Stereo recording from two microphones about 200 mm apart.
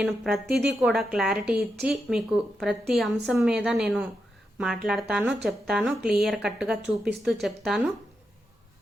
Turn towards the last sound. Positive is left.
turn(degrees=0)  # may be behind; listen again after turning